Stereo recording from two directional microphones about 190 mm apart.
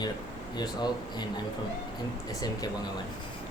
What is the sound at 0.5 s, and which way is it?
Speech, 20° left (ahead or behind).